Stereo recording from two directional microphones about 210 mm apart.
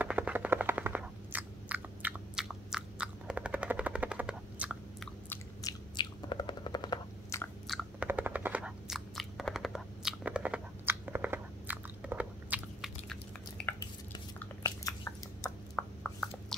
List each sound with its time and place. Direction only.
0.0 s chewing: 5° right (ahead or behind)
5.3 s bird: 15° left (ahead or behind)
7.6 s chewing: 5° right (ahead or behind)
14.6 s chewing: 15° left (ahead or behind)
15.7 s a sound: centre (ahead or behind)